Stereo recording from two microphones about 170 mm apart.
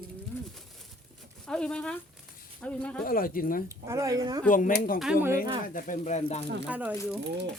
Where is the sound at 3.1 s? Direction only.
55° left (ahead or behind).